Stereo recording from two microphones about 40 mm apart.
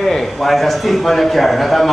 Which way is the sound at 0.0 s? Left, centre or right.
Centre.